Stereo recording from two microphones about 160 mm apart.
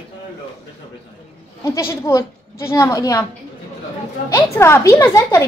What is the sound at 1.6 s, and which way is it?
Speech, 20° left (ahead or behind).